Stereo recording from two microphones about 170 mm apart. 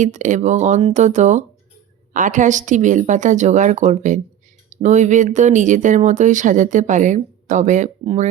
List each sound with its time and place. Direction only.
0.0 s speech: 45° right (ahead or behind)